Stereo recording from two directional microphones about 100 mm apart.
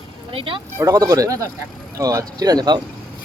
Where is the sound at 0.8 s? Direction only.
35° right (ahead or behind).